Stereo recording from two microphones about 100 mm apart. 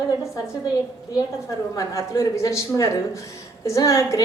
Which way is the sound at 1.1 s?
30° left (ahead or behind).